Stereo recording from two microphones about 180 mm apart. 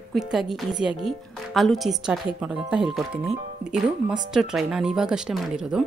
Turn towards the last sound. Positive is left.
turn(degrees=0)  # may be behind; listen again after turning